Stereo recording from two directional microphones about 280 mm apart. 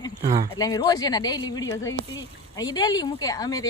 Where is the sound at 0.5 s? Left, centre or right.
Centre.